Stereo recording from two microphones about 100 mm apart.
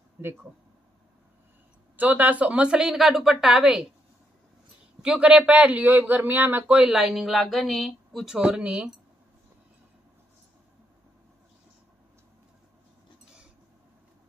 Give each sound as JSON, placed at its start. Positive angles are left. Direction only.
{"t": 0.2, "sound": "speech", "side_deg": -20}
{"t": 2.0, "sound": "a woman's voice", "side_deg": -15}
{"t": 5.0, "sound": "a woman's voice", "side_deg": -10}
{"t": 6.8, "sound": "a woman's voice", "side_deg": -5}